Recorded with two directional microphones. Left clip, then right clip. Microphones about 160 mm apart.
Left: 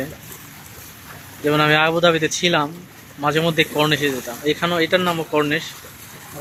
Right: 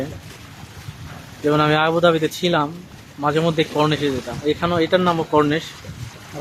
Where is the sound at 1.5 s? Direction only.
5° right (ahead or behind).